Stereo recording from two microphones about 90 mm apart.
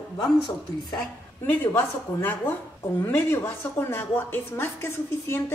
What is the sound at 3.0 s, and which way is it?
A woman's voice, 25° left (ahead or behind).